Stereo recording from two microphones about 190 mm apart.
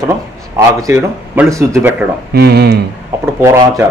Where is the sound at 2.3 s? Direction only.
60° right (ahead or behind).